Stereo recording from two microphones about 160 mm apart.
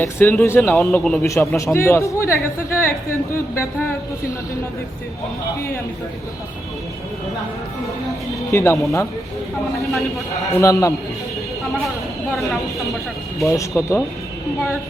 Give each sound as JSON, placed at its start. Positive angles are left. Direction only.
{"t": 0.0, "sound": "speech", "side_deg": 15}
{"t": 1.2, "sound": "speech", "side_deg": 20}
{"t": 8.5, "sound": "speech", "side_deg": 15}
{"t": 10.6, "sound": "a man's voice", "side_deg": 20}
{"t": 13.4, "sound": "speech", "side_deg": 20}